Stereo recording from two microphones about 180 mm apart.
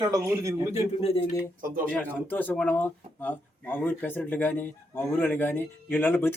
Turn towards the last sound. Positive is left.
turn(degrees=10)  # may be behind; listen again after turning